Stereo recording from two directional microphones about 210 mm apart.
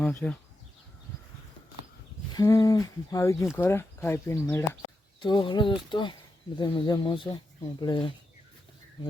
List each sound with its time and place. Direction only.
0.0 s speech: 5° left (ahead or behind)
2.3 s speech: 15° left (ahead or behind)
5.2 s speech: 20° left (ahead or behind)